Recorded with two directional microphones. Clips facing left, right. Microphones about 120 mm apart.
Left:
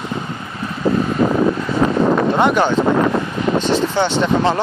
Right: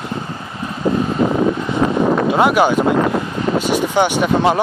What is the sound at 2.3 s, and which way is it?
Speech, 5° right (ahead or behind).